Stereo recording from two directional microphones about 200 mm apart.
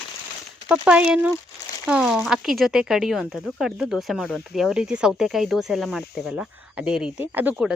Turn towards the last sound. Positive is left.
turn(degrees=-5)  # may be behind; listen again after turning